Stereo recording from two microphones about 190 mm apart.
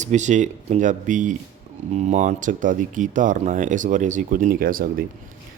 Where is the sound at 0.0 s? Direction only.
40° right (ahead or behind).